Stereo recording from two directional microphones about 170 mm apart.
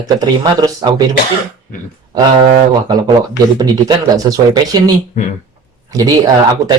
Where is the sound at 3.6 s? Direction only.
25° right (ahead or behind).